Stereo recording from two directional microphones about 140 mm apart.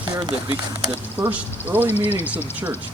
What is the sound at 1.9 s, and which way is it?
Speech, 50° left (ahead or behind).